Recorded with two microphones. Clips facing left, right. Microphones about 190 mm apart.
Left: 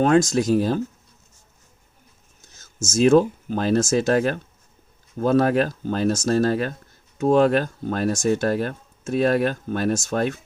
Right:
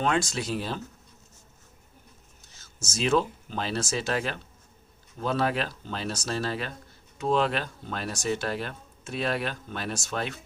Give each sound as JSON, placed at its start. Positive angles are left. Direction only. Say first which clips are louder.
{"t": 0.0, "sound": "speech", "louder": "left 10 dB", "side_deg": 45}
{"t": 2.4, "sound": "a sound", "louder": "left 3 dB", "side_deg": 45}
{"t": 2.8, "sound": "speech", "louder": "left 10 dB", "side_deg": 45}